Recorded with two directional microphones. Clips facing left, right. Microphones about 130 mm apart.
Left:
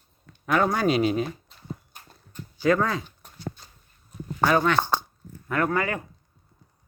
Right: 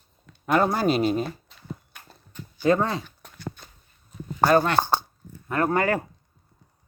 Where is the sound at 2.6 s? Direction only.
25° right (ahead or behind).